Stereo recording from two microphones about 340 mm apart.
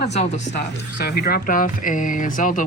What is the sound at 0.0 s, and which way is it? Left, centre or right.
Speech, centre.